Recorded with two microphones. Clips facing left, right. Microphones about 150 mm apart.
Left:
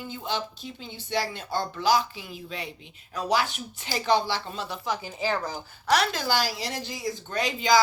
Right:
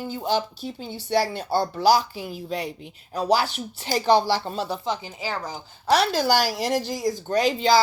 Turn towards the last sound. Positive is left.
turn(degrees=-35)  # may be behind; listen again after turning